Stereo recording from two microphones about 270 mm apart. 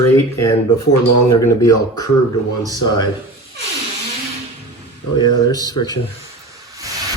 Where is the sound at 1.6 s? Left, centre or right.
Centre.